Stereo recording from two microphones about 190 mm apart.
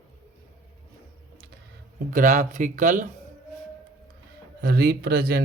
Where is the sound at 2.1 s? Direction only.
40° right (ahead or behind).